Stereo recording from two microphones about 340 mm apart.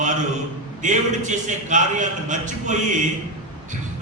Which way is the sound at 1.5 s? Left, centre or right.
Right.